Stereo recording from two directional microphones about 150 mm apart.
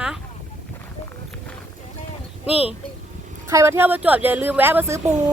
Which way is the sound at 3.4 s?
20° right (ahead or behind).